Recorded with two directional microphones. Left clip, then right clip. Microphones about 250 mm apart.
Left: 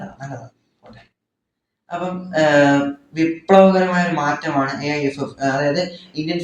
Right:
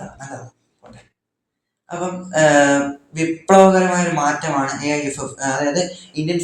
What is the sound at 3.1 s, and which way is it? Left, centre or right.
A man's voice, right.